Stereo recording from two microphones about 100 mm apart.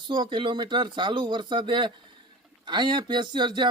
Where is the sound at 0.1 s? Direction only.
55° right (ahead or behind).